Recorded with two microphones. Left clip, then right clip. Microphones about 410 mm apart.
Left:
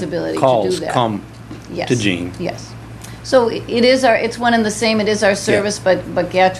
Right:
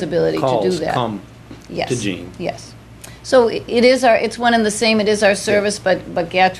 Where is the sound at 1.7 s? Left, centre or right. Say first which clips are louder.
Left 3 dB; right.